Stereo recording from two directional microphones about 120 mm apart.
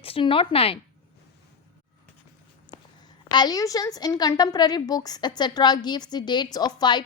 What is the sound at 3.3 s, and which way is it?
A woman's voice, 35° left (ahead or behind).